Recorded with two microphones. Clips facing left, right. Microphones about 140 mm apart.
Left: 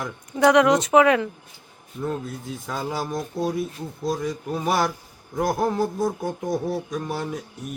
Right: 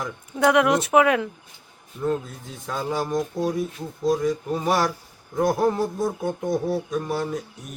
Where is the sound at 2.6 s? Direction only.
5° left (ahead or behind).